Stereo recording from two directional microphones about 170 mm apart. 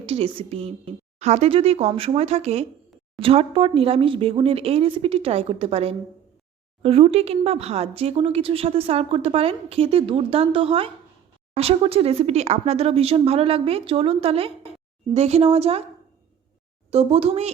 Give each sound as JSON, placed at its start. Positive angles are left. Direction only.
{"t": 0.0, "sound": "speech", "side_deg": -35}
{"t": 16.9, "sound": "speech", "side_deg": -35}